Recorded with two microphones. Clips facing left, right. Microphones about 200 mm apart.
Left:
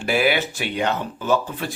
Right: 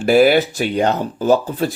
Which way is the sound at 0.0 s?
40° right (ahead or behind).